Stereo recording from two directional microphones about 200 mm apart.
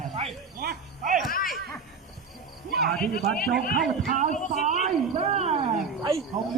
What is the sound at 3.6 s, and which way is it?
Speech, 45° left (ahead or behind).